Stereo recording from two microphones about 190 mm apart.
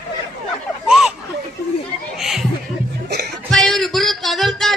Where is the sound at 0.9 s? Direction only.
5° right (ahead or behind).